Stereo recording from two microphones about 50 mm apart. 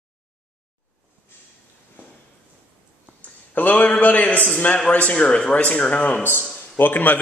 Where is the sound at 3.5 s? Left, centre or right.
Left.